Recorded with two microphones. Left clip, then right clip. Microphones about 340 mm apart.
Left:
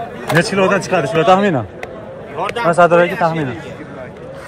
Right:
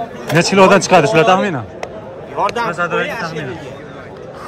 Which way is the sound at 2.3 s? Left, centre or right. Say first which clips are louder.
Right 1 dB; right.